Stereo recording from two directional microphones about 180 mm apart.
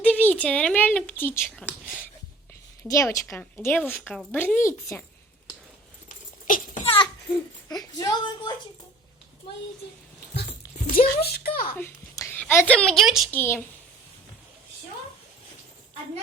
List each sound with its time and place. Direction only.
0.0 s a woman's voice: 10° left (ahead or behind)
1.6 s speech: 5° right (ahead or behind)
2.8 s speech: 15° left (ahead or behind)
6.1 s a sound: 45° left (ahead or behind)
7.9 s a woman's voice: 20° left (ahead or behind)
10.9 s speech: 55° left (ahead or behind)
11.8 s a woman's voice: 15° left (ahead or behind); by 13.3 s centre (ahead or behind)
13.3 s speech: 10° left (ahead or behind)